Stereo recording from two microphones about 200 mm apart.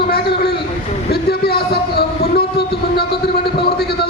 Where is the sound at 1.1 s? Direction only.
55° left (ahead or behind).